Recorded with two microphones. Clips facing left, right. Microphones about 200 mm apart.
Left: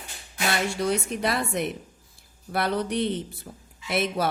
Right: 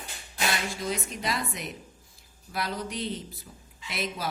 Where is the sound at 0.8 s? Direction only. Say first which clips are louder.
Left 6 dB; 60° left (ahead or behind).